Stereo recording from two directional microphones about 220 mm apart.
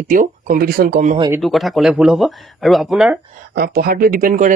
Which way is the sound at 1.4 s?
Centre (ahead or behind).